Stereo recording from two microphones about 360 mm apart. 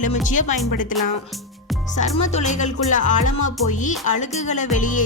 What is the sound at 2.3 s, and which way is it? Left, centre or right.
Speech, centre.